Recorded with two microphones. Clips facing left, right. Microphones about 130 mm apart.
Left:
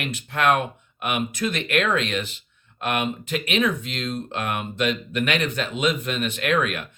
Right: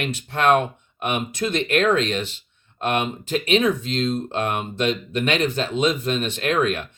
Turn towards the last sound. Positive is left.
turn(degrees=-30)  # may be behind; listen again after turning